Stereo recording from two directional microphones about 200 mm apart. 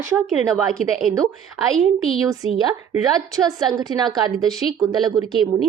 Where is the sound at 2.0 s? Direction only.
30° left (ahead or behind).